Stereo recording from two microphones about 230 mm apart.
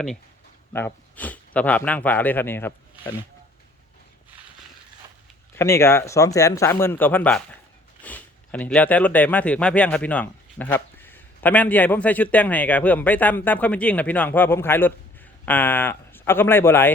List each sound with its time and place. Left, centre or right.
0.7 s speech: centre
5.5 s speech: centre